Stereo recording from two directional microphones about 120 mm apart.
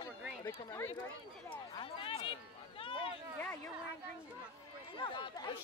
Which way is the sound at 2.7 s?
50° left (ahead or behind).